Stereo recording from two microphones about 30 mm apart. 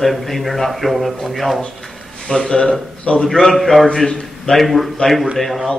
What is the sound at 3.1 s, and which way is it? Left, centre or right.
Speech, left.